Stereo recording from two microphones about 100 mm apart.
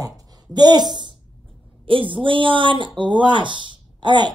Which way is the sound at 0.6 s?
45° right (ahead or behind).